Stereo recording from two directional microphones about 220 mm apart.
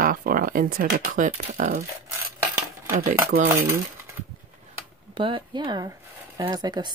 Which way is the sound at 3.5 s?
10° right (ahead or behind).